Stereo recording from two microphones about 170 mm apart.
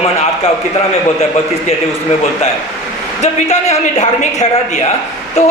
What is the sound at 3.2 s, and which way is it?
A man's voice, 40° left (ahead or behind).